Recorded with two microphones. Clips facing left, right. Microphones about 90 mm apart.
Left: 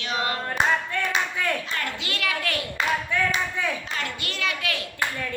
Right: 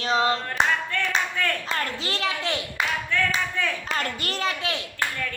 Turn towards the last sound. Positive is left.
turn(degrees=-30)  # may be behind; listen again after turning